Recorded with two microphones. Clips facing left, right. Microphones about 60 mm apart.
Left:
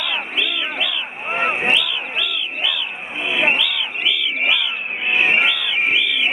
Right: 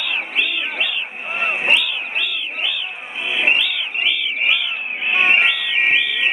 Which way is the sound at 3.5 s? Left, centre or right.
Right.